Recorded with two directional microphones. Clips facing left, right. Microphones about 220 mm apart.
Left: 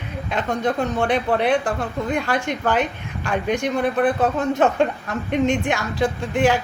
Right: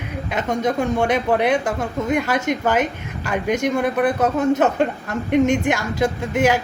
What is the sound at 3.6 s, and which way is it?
Speech, 10° right (ahead or behind).